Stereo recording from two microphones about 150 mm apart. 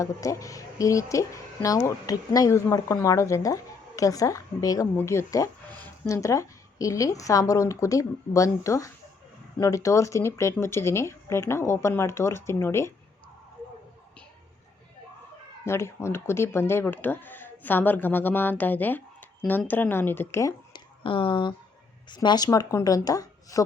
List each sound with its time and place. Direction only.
0.0 s speech: 20° left (ahead or behind)
15.6 s speech: 15° left (ahead or behind)
21.0 s speech: 35° left (ahead or behind)